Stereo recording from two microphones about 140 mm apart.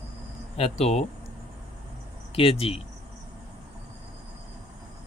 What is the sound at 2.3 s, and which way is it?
Speech, 40° left (ahead or behind).